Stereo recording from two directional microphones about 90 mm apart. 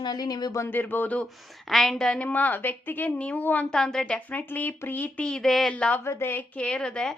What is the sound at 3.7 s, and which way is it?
A woman's voice, 5° left (ahead or behind).